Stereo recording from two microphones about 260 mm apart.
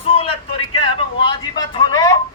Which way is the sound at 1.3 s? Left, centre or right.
Centre.